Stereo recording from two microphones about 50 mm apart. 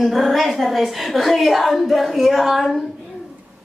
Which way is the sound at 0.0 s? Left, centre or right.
Centre.